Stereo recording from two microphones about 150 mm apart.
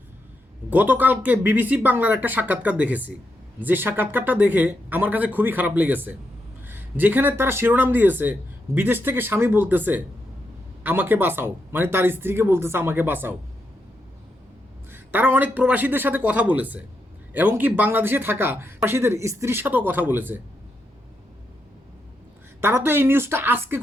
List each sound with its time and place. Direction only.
0.7 s speech: 10° right (ahead or behind)
14.8 s speech: 15° right (ahead or behind)
22.6 s speech: 15° right (ahead or behind)